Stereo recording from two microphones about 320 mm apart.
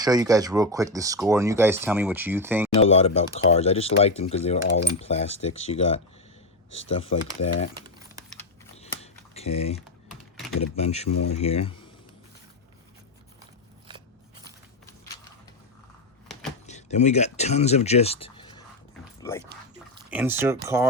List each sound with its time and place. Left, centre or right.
0.0 s speech: centre
2.9 s speech: centre
7.2 s speech: left
8.7 s typing: centre
10.6 s speech: centre
11.1 s speech: left
11.3 s speech: centre
16.6 s speech: left
20.1 s speech: centre